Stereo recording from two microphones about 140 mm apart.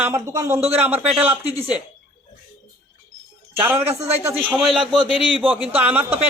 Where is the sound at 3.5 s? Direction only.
15° right (ahead or behind).